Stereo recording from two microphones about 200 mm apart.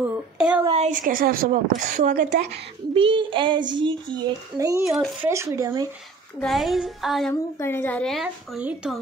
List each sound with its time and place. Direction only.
0.0 s a sound: 10° right (ahead or behind)
0.7 s a woman's voice: 35° right (ahead or behind)
2.1 s a woman's voice: 60° right (ahead or behind)
2.9 s child singing: 25° right (ahead or behind)
4.8 s a woman's voice: centre (ahead or behind)
5.3 s speech: 15° right (ahead or behind)
6.4 s a woman's voice: centre (ahead or behind)
7.5 s a woman's voice: 10° left (ahead or behind); by 8.9 s 5° right (ahead or behind)